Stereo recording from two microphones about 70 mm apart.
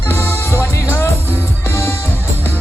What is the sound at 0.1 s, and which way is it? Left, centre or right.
Music, left.